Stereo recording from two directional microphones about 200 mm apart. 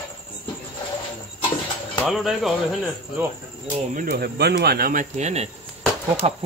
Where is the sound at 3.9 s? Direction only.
50° right (ahead or behind).